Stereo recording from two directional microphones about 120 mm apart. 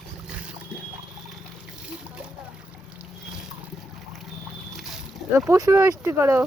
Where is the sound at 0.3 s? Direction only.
10° right (ahead or behind).